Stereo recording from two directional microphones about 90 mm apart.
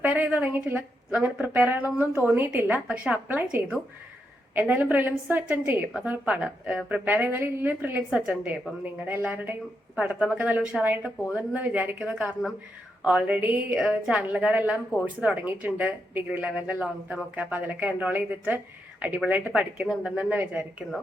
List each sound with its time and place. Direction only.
0.0 s a woman's voice: 15° right (ahead or behind)
4.6 s a woman's voice: 15° right (ahead or behind)
11.9 s a woman's voice: 5° right (ahead or behind)
19.9 s a woman's voice: 5° right (ahead or behind)
20.1 s a woman's voice: 15° right (ahead or behind)